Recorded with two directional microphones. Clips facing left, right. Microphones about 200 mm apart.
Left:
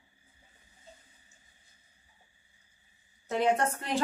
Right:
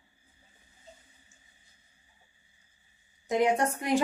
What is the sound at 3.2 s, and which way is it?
Speech, 15° right (ahead or behind).